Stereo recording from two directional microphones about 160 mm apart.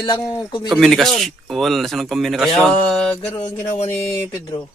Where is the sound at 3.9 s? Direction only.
15° left (ahead or behind).